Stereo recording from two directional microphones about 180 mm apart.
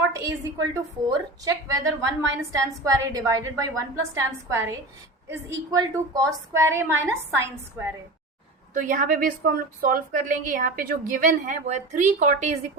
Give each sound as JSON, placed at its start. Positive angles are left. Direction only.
{"t": 0.1, "sound": "a woman's voice", "side_deg": -15}
{"t": 8.7, "sound": "a woman's voice", "side_deg": -45}